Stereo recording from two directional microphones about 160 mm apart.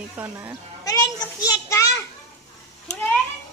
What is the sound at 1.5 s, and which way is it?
Children playing, 20° left (ahead or behind).